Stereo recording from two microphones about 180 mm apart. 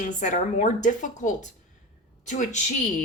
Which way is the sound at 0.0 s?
45° left (ahead or behind).